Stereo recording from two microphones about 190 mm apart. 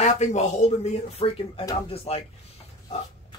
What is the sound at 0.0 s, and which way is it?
A man's voice, 35° left (ahead or behind).